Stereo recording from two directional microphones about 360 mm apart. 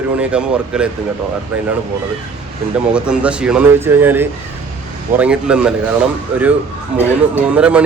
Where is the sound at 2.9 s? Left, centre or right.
Centre.